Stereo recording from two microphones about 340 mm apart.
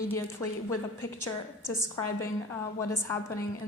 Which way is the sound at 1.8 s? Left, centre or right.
Centre.